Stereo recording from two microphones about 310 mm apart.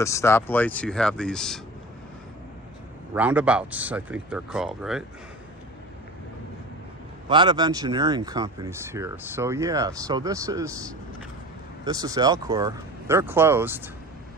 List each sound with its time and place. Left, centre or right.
0.0 s speech: centre
3.2 s speech: centre
7.2 s speech: centre
11.8 s speech: centre